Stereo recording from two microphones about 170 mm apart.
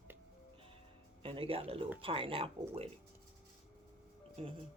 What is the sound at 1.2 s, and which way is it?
Speech, 35° right (ahead or behind).